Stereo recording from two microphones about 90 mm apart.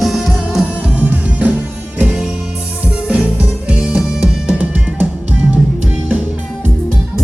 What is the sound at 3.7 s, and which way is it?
Music, 10° right (ahead or behind).